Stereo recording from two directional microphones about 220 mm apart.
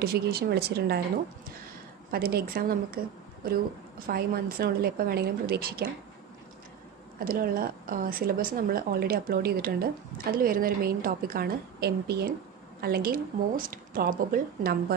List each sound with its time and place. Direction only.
0.0 s a woman's voice: 45° right (ahead or behind)
2.0 s a woman's voice: 45° right (ahead or behind)
4.0 s a woman's voice: 40° right (ahead or behind)
7.2 s a woman's voice: 40° right (ahead or behind)